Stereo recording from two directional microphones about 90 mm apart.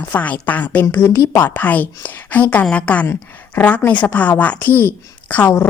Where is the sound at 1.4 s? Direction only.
20° left (ahead or behind).